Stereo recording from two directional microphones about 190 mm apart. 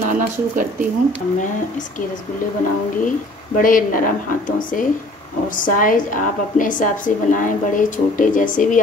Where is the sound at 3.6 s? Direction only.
45° left (ahead or behind).